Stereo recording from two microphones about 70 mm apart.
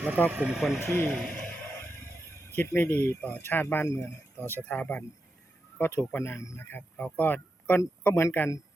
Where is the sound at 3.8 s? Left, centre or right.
Left.